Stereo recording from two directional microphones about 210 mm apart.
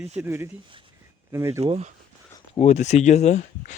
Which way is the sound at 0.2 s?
10° right (ahead or behind).